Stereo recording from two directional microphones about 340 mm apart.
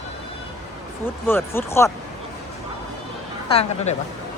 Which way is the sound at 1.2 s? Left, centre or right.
Centre.